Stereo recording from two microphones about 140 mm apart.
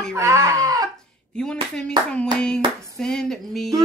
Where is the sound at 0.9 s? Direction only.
5° left (ahead or behind).